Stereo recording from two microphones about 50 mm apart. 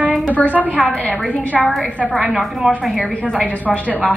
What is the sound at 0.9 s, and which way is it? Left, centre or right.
Speech, left.